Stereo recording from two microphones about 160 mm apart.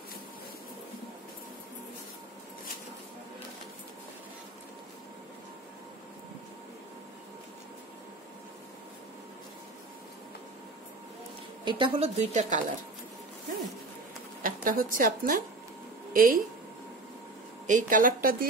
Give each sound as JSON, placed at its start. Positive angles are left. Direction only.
{"t": 11.6, "sound": "a woman's voice", "side_deg": -30}
{"t": 14.4, "sound": "a woman's voice", "side_deg": -60}
{"t": 17.6, "sound": "a woman's voice", "side_deg": -55}